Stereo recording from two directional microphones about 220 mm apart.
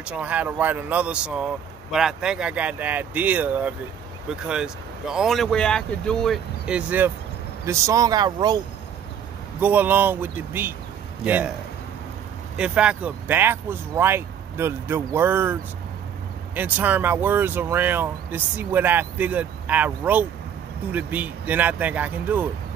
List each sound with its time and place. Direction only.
0.0 s speech: 5° right (ahead or behind)
9.6 s speech: 10° right (ahead or behind)
12.5 s speech: 5° right (ahead or behind)